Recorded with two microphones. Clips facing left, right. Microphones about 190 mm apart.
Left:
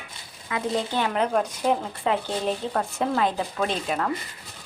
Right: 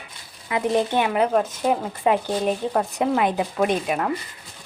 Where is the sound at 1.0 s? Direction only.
5° right (ahead or behind).